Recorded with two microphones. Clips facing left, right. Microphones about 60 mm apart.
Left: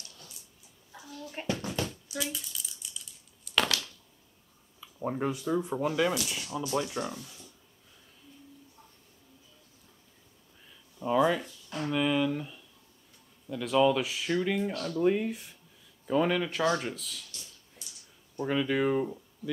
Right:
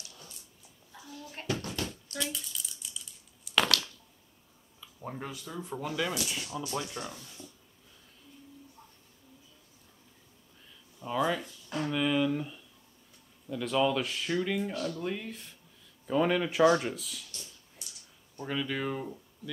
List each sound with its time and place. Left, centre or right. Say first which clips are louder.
1.3 s bouncing: left 1 dB; centre
1.9 s a sound: left 1 dB; centre
4.7 s speech: left 8 dB; centre
6.1 s speech: left 2 dB; centre
11.1 s speech: left 4 dB; centre
11.8 s a sound: left 1 dB; centre
13.5 s speech: left 3 dB; centre
15.0 s speech: left 9 dB; centre
16.1 s speech: even; centre
18.4 s speech: left 6 dB; centre